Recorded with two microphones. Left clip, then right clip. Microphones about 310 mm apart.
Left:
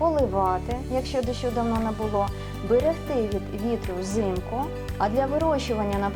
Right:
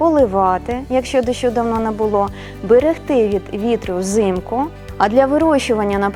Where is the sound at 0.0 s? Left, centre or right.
Right.